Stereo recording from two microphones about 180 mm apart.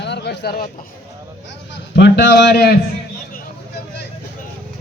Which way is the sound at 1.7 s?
70° left (ahead or behind).